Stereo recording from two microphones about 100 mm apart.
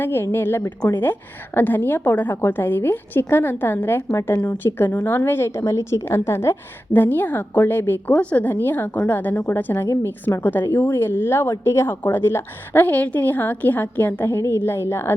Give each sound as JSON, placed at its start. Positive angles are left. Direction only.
{"t": 0.0, "sound": "a woman's voice", "side_deg": 25}